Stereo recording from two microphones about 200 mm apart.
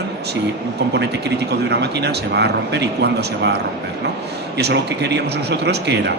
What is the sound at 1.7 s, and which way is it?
A man's voice, 55° right (ahead or behind).